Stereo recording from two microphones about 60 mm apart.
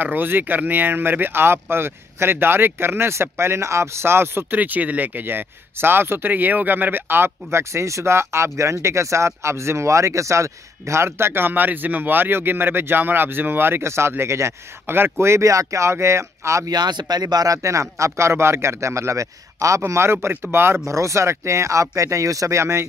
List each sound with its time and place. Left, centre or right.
0.0 s speech: right
4.6 s speech: right
17.2 s a man's voice: right
19.9 s speech: right
20.8 s a man's voice: right